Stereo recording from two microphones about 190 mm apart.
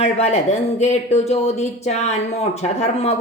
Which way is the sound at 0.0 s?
35° left (ahead or behind).